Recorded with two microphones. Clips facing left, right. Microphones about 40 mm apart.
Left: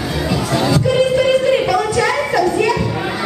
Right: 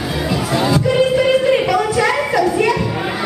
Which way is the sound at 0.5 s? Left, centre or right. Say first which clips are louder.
Even; centre.